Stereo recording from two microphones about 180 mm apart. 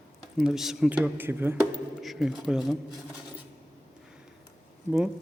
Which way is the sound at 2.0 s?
Centre (ahead or behind).